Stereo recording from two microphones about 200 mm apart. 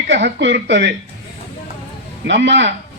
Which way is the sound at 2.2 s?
60° right (ahead or behind).